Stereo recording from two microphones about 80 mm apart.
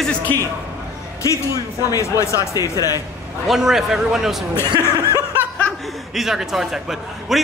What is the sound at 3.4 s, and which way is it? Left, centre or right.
A man's voice, centre.